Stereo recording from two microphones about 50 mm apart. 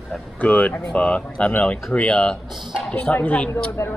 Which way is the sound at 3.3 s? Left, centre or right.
Left.